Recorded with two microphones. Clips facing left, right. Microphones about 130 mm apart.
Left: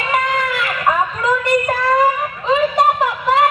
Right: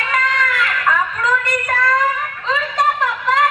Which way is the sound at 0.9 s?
35° left (ahead or behind).